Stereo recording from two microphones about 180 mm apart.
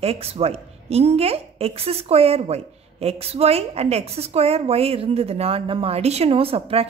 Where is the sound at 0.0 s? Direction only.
35° right (ahead or behind).